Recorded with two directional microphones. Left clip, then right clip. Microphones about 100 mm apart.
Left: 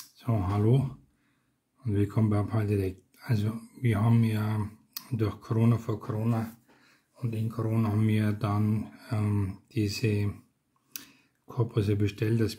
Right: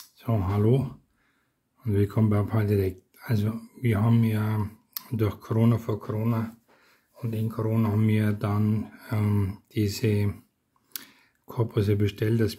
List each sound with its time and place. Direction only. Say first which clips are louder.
0.1 s speech: right 2 dB; 25° right (ahead or behind)
1.8 s speech: right 4 dB; 40° right (ahead or behind)
2.0 s speech: right 3 dB; 30° right (ahead or behind)
9.0 s speech: right 4 dB; 30° right (ahead or behind)
10.9 s speech: right 3 dB; 45° right (ahead or behind); by 12.5 s 30° right (ahead or behind)